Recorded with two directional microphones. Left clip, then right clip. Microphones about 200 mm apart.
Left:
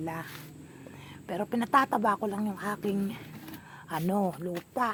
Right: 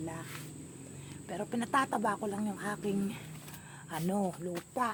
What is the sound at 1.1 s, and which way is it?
Speech, 25° left (ahead or behind).